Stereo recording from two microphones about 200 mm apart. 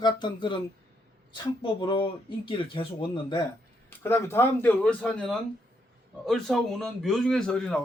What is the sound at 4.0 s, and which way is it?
A man's voice, 10° left (ahead or behind).